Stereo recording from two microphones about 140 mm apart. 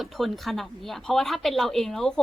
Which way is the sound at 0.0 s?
Centre (ahead or behind).